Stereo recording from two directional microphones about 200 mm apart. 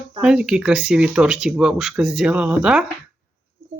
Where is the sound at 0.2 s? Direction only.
5° right (ahead or behind).